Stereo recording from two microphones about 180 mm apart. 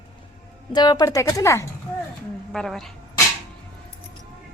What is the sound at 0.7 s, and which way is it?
Speech, 25° left (ahead or behind).